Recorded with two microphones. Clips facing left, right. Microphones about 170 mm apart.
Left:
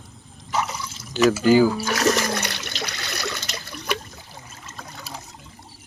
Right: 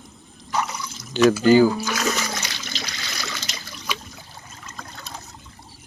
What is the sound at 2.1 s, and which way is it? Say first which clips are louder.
Toilet flush: left 5 dB; 60° left (ahead or behind).